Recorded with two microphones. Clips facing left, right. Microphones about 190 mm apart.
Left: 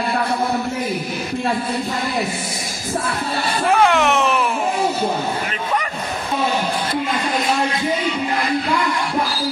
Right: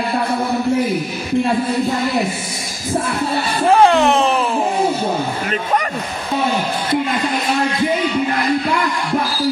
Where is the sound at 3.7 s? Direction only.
30° right (ahead or behind).